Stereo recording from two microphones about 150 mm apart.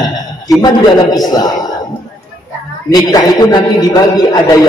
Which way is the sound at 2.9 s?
25° left (ahead or behind).